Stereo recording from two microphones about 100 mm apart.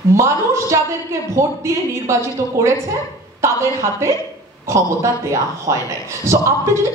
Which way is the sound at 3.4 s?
30° right (ahead or behind).